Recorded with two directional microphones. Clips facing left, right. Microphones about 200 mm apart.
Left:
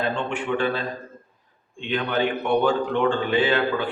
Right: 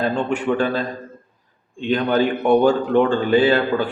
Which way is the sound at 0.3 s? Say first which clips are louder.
Right 4 dB; 40° right (ahead or behind).